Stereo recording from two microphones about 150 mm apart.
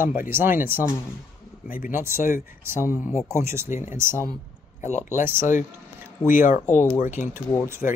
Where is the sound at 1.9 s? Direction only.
15° right (ahead or behind).